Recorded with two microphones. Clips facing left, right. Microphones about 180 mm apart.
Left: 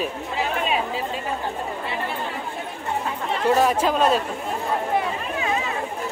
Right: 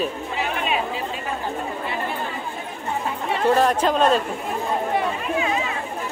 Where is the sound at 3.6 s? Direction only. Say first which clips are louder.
Right 1 dB; 5° left (ahead or behind).